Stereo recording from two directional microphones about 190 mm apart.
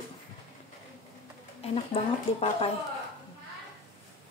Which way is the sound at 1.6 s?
35° left (ahead or behind).